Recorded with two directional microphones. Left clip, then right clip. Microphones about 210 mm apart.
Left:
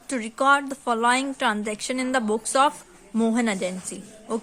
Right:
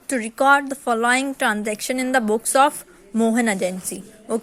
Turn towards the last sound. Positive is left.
turn(degrees=-15)  # may be behind; listen again after turning